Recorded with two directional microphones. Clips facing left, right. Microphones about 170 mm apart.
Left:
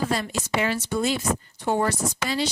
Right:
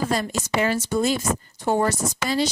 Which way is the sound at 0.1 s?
45° right (ahead or behind).